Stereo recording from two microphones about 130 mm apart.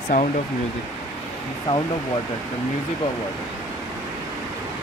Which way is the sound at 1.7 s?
45° left (ahead or behind).